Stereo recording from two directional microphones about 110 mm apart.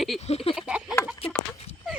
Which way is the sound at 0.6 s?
10° right (ahead or behind).